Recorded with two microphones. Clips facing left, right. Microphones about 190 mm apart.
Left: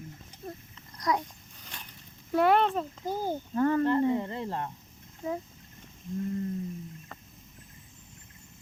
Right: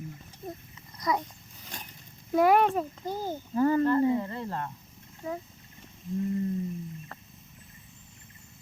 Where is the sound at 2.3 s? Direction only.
10° right (ahead or behind).